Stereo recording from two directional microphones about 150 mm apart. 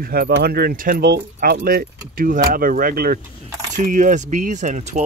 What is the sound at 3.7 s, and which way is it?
Speech, 60° right (ahead or behind).